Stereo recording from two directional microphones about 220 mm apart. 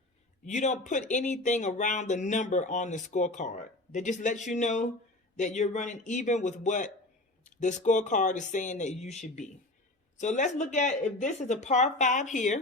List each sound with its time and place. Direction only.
0.4 s speech: 30° left (ahead or behind)